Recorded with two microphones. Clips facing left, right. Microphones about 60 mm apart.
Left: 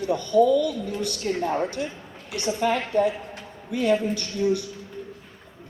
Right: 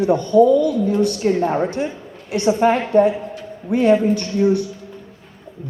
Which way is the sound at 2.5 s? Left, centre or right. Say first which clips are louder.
Right 7 dB; right.